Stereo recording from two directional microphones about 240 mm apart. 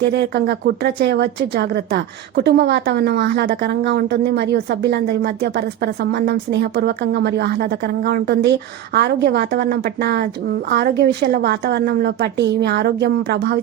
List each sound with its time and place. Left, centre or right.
0.0 s speech: right